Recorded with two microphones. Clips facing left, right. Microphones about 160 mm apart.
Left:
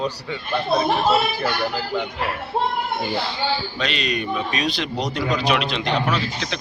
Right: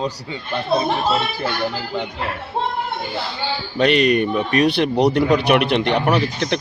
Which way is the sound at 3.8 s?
60° right (ahead or behind).